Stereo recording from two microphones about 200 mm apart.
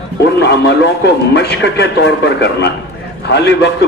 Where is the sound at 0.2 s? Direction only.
55° left (ahead or behind).